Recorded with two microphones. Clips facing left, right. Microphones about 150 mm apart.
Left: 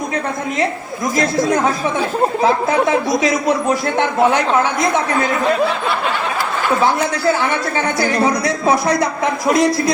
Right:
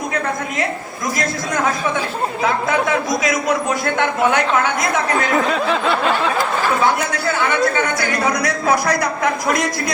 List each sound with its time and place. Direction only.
2.4 s speech: 30° left (ahead or behind)
7.9 s speech: 30° left (ahead or behind)